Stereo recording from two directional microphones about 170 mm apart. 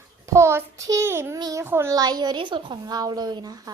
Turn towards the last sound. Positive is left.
turn(degrees=-25)  # may be behind; listen again after turning